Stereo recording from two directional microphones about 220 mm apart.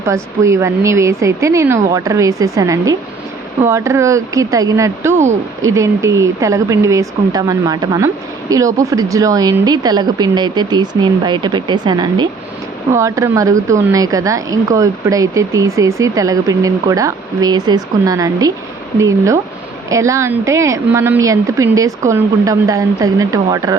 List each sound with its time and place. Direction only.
0.0 s speech: 15° right (ahead or behind)